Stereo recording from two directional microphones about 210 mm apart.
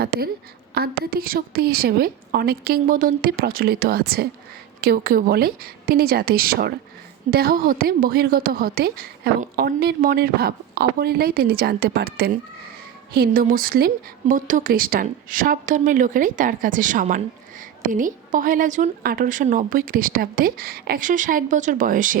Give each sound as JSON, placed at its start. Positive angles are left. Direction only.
{"t": 0.0, "sound": "a woman's voice", "side_deg": -45}